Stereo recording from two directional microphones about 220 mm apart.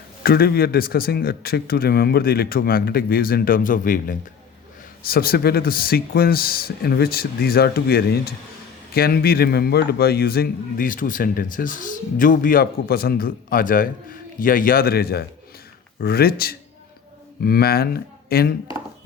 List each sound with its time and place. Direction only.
0.2 s a man's voice: 45° left (ahead or behind)